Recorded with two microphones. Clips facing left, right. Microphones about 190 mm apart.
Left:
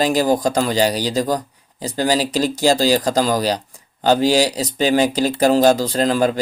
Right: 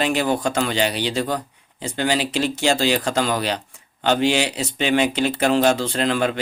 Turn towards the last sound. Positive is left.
turn(degrees=40)  # may be behind; listen again after turning